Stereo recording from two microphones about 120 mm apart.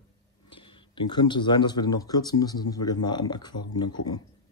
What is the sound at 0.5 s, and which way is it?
Speech, 45° left (ahead or behind).